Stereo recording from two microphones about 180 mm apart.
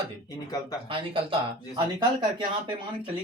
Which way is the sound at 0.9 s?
30° right (ahead or behind).